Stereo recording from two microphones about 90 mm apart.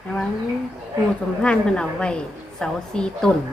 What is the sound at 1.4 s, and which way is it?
A woman's voice, 10° left (ahead or behind).